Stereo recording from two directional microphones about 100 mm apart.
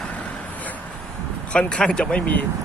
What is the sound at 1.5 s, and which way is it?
Speech, 10° left (ahead or behind).